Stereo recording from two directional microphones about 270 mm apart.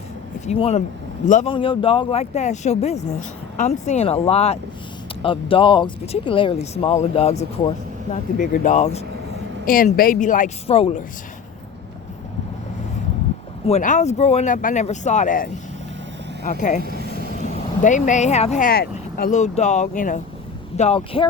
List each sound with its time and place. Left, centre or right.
0.4 s speech: left
13.7 s speech: left